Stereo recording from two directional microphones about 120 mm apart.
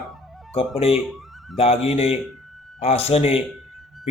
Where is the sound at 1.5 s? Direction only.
55° left (ahead or behind).